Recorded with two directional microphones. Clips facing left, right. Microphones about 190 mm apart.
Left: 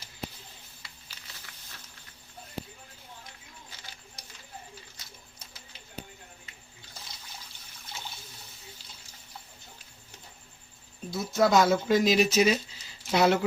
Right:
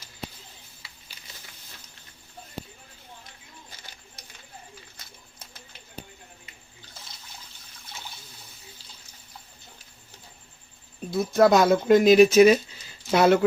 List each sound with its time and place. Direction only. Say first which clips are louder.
5.0 s bird: right 1 dB; 55° right (ahead or behind)
11.1 s speech: right 5 dB; 55° right (ahead or behind)